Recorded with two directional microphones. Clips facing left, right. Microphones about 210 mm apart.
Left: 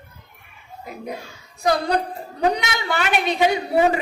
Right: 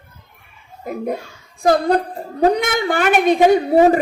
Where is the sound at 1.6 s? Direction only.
50° right (ahead or behind).